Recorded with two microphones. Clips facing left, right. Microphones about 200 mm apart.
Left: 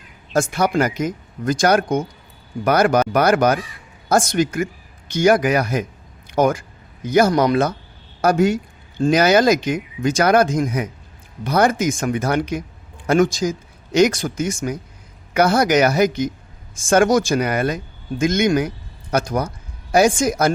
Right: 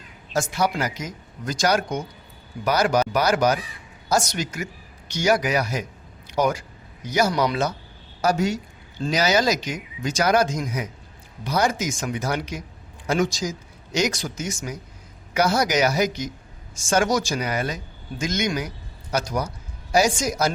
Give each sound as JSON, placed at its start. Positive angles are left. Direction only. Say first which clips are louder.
{"t": 0.3, "sound": "speech", "louder": "left 6 dB", "side_deg": 55}